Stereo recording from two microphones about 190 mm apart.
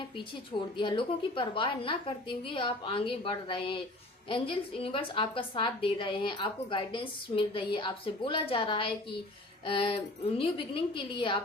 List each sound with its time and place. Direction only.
0.8 s a woman's voice: 25° left (ahead or behind)